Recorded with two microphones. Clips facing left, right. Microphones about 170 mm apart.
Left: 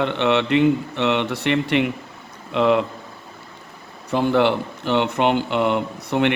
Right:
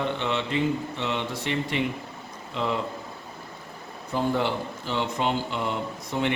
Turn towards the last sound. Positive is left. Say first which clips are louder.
# left 7 dB
turn(degrees=70)  # may be behind; listen again after turning